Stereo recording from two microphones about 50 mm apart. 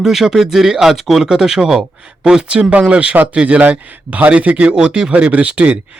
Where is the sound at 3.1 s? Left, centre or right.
Right.